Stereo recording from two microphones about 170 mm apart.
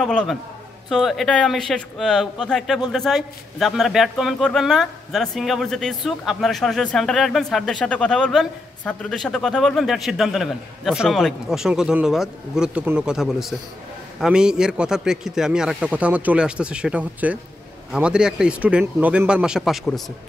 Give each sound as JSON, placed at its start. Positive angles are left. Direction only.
{"t": 0.0, "sound": "a man's voice", "side_deg": 5}